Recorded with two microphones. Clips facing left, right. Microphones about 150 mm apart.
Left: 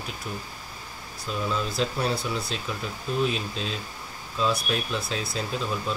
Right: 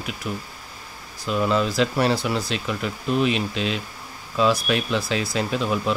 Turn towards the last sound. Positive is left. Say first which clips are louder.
# right 6 dB
turn(degrees=-75)  # may be behind; listen again after turning